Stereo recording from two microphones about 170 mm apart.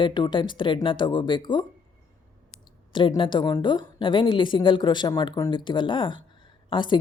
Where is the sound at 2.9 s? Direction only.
30° left (ahead or behind).